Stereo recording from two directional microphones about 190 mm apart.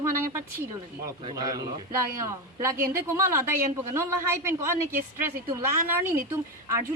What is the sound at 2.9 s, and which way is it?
A woman's voice, 15° right (ahead or behind).